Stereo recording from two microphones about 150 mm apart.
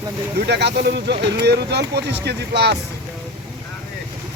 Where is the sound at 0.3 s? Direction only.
90° right.